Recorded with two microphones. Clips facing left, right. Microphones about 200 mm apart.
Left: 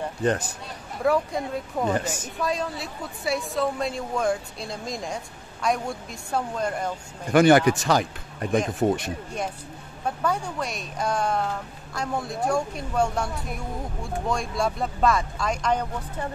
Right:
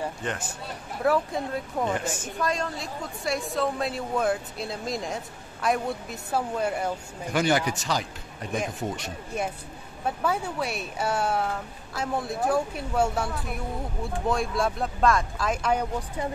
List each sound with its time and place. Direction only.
0.2 s speech: 40° left (ahead or behind)
1.0 s a woman's voice: centre (ahead or behind)
7.3 s speech: 55° left (ahead or behind)
10.0 s a woman's voice: 5° right (ahead or behind)